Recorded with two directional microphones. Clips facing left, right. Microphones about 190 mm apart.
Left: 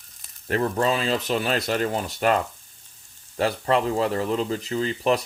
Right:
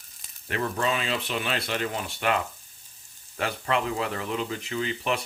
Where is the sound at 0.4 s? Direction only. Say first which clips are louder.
Left 5 dB; 40° left (ahead or behind).